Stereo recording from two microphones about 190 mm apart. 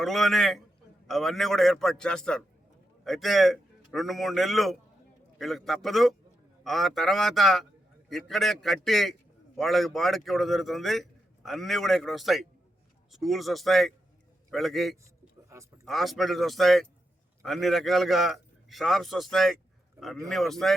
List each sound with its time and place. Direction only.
0.0 s a man's voice: centre (ahead or behind)
15.4 s a sound: 15° right (ahead or behind)
15.9 s a man's voice: centre (ahead or behind)